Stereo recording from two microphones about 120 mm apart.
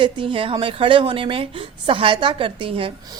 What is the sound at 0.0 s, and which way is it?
A woman's voice, 45° right (ahead or behind).